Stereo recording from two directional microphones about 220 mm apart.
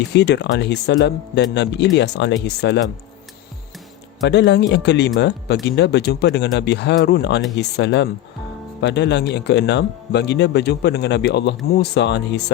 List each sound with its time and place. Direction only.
0.1 s speech: 50° left (ahead or behind)
4.2 s speech: 55° left (ahead or behind)